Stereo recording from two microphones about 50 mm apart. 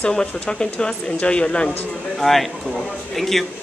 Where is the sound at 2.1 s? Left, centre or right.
Centre.